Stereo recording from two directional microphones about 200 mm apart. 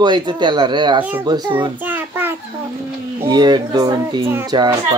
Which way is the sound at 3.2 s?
20° right (ahead or behind).